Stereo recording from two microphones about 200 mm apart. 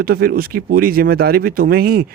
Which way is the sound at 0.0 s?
50° right (ahead or behind).